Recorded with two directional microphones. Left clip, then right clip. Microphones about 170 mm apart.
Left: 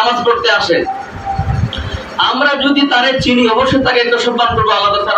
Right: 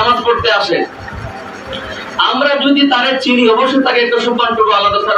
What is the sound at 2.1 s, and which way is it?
A man's voice, 20° left (ahead or behind).